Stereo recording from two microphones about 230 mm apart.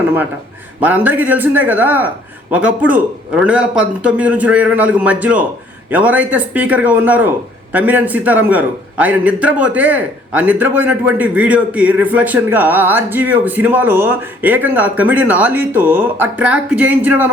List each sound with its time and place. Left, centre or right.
0.8 s a man's voice: centre